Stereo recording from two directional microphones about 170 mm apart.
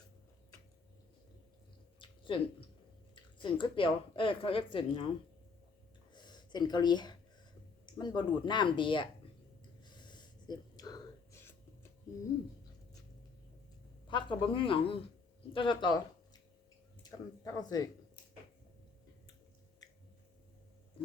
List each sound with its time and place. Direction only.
2.0 s a sound: 30° left (ahead or behind)
3.2 s speech: 30° left (ahead or behind)
6.1 s speech: 25° left (ahead or behind)
9.8 s a sound: 25° left (ahead or behind)
14.1 s speech: 30° left (ahead or behind)
17.0 s speech: 20° left (ahead or behind)